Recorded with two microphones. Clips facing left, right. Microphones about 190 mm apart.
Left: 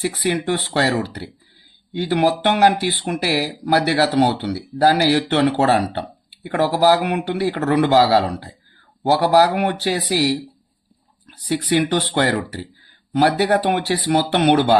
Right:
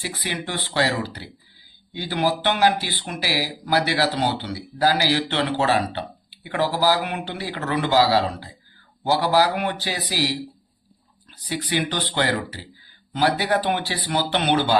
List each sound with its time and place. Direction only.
0.0 s speech: 60° left (ahead or behind)
6.7 s speech: 60° left (ahead or behind)
11.3 s speech: 50° left (ahead or behind)